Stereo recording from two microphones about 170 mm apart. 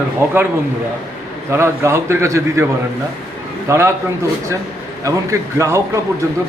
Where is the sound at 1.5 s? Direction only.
15° right (ahead or behind).